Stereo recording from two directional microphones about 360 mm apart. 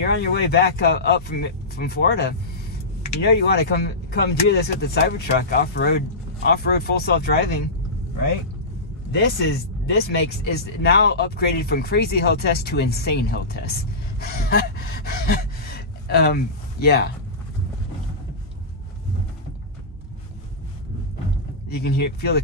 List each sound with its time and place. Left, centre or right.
0.0 s speech: left
9.1 s speech: left
14.2 s gasp: left
21.6 s speech: left